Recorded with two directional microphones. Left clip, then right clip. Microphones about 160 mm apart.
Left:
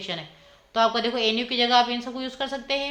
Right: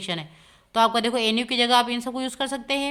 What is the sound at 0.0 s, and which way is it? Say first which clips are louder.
A woman's voice: right 2 dB; 40° right (ahead or behind).